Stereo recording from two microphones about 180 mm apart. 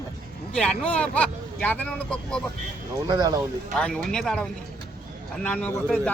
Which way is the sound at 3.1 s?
20° right (ahead or behind).